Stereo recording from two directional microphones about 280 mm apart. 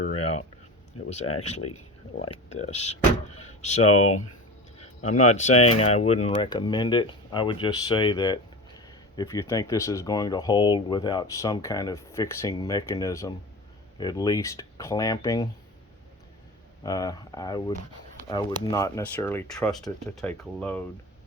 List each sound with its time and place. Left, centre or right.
0.9 s speech: left
1.4 s speech: left
3.8 s speech: left
5.3 s speech: left
16.8 s speech: centre